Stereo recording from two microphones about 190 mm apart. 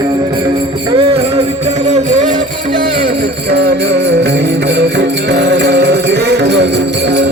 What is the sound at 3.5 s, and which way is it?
Music, 60° right (ahead or behind).